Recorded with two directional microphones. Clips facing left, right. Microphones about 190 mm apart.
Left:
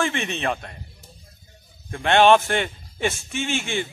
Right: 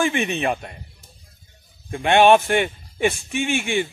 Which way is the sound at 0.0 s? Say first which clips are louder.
Right 3 dB; 15° right (ahead or behind).